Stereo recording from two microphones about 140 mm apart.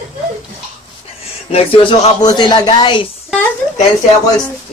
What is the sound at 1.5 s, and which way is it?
Speech, 40° left (ahead or behind).